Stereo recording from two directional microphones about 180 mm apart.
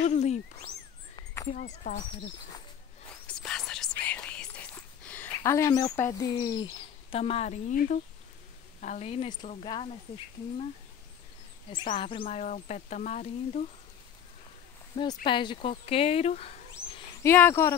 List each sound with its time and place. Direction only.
0.0 s speech: 40° left (ahead or behind)
1.1 s a sound: 20° left (ahead or behind)
1.5 s speech: 45° left (ahead or behind)
3.3 s whispering: 5° left (ahead or behind); by 8.0 s 45° left (ahead or behind)
8.8 s speech: 40° left (ahead or behind)
12.0 s speech: 30° left (ahead or behind)
15.2 s speech: 25° left (ahead or behind)
17.2 s speech: 10° left (ahead or behind)